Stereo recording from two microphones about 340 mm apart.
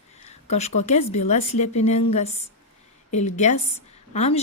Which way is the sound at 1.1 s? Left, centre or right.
Centre.